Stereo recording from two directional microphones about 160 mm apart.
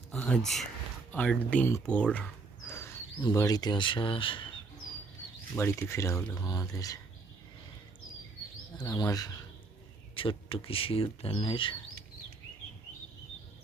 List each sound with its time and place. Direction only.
0.1 s speech: 10° left (ahead or behind); by 4.6 s 30° left (ahead or behind)
5.5 s speech: 15° left (ahead or behind)
8.8 s speech: 25° left (ahead or behind)
10.2 s speech: 35° left (ahead or behind)